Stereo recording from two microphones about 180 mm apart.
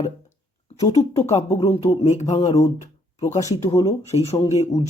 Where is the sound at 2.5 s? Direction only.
15° left (ahead or behind).